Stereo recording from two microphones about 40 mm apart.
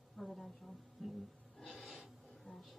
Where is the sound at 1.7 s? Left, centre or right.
Centre.